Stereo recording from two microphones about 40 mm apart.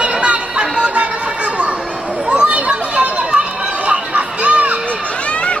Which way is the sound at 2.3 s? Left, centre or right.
Right.